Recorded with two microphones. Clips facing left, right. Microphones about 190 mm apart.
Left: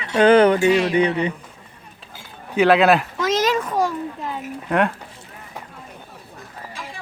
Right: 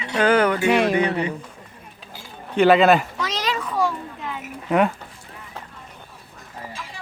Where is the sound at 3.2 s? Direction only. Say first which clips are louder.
Left 7 dB; 45° left (ahead or behind).